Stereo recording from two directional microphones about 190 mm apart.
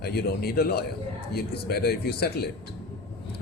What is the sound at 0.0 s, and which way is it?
A man's voice, 55° left (ahead or behind).